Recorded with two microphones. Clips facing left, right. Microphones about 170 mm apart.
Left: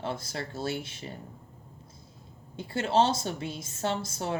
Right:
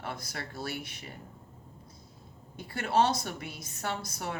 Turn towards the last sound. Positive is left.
turn(degrees=25)  # may be behind; listen again after turning